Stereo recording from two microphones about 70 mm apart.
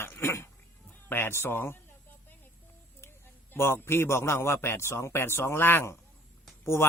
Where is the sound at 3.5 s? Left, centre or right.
Left.